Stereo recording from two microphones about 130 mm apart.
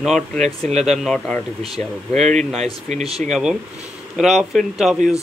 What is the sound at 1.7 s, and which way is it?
Speech, 60° right (ahead or behind).